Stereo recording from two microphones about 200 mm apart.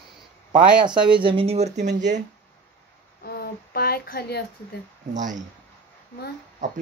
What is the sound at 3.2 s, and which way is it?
Speech, 50° left (ahead or behind).